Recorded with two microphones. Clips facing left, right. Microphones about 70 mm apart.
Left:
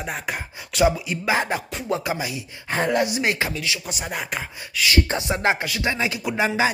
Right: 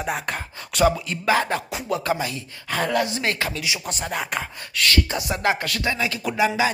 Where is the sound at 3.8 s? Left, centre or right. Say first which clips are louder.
Right 2 dB; centre.